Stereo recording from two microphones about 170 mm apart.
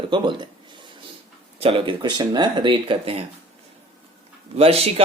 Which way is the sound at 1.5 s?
30° right (ahead or behind).